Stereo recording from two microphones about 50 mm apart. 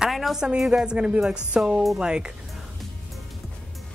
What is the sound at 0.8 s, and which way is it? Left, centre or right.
A woman's voice, right.